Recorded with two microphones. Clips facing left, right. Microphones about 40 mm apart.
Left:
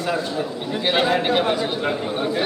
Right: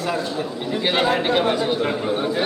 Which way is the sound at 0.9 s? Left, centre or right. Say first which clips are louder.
Left 1 dB; centre.